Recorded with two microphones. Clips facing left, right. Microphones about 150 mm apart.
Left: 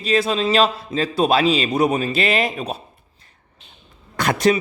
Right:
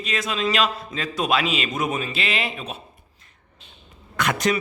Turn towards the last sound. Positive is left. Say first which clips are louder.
# left 5 dB
turn(degrees=35)  # may be behind; listen again after turning